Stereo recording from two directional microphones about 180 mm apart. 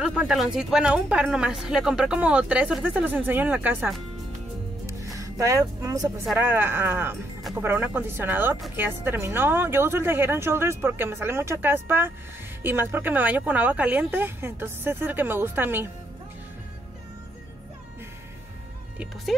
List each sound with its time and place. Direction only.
0.0 s speech: 5° right (ahead or behind)
4.8 s music: 20° right (ahead or behind)
6.3 s a woman's voice: 10° right (ahead or behind)